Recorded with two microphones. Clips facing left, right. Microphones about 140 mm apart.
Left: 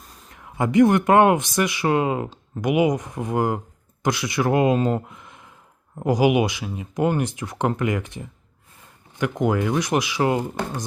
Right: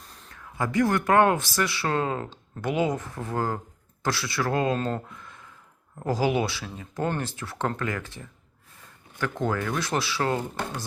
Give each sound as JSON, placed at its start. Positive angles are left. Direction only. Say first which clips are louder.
{"t": 0.0, "sound": "speech", "louder": "left 2 dB", "side_deg": 10}